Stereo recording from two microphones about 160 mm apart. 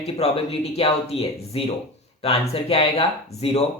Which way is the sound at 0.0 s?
40° left (ahead or behind).